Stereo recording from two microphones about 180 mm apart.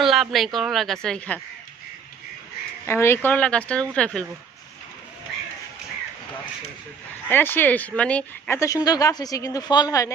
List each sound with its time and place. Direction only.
0.0 s speech: centre (ahead or behind)
2.8 s speech: 15° left (ahead or behind)
7.3 s speech: 10° left (ahead or behind)